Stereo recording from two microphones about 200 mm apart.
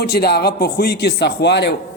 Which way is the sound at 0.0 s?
55° left (ahead or behind).